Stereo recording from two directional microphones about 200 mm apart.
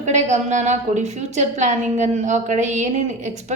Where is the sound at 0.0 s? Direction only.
35° right (ahead or behind).